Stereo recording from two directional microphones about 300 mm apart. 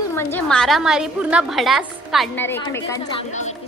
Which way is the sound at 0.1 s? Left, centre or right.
Centre.